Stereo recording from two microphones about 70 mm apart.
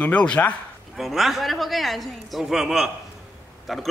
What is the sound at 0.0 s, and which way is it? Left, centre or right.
Speech, centre.